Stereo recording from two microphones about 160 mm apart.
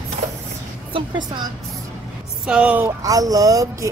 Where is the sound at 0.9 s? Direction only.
30° right (ahead or behind).